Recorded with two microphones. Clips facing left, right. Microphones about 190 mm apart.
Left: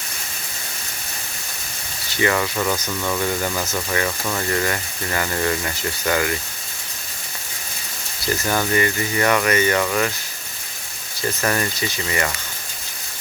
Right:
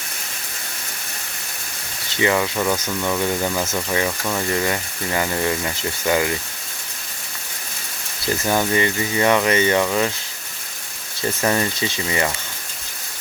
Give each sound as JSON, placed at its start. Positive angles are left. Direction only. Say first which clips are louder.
{"t": 2.2, "sound": "speech", "louder": "right 1 dB", "side_deg": -15}
{"t": 8.4, "sound": "speech", "louder": "right 1 dB", "side_deg": -20}
{"t": 11.4, "sound": "speech", "louder": "right 3 dB", "side_deg": -20}